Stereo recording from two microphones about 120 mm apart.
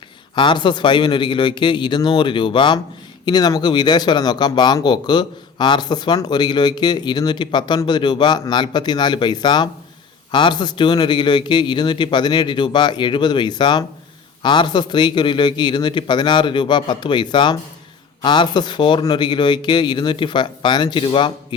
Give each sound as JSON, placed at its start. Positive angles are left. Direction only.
{"t": 0.3, "sound": "speech", "side_deg": 40}